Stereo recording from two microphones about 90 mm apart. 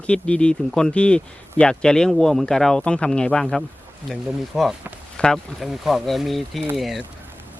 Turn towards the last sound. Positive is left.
turn(degrees=0)  # may be behind; listen again after turning